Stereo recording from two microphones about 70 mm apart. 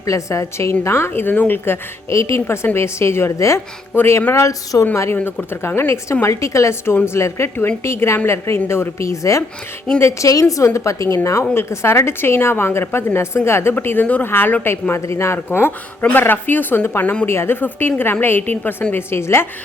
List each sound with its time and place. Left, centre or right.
0.0 s a woman's voice: left
3.9 s a woman's voice: left
4.4 s a woman's voice: left
5.1 s a woman's voice: left
11.5 s a woman's voice: left
17.0 s speech: left
17.2 s a woman's voice: left